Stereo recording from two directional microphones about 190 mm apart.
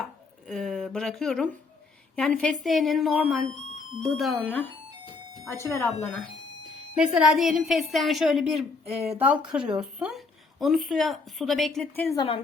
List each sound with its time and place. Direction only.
0.0 s chopping: centre (ahead or behind)
2.1 s speech: centre (ahead or behind)
5.7 s speech: 15° left (ahead or behind)
6.9 s speech: 5° right (ahead or behind)
12.1 s speech: 25° left (ahead or behind)